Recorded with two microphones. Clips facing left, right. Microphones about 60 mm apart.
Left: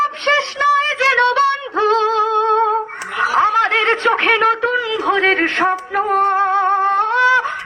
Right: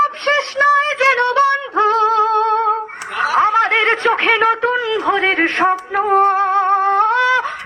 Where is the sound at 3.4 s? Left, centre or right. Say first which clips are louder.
Right 1 dB; centre.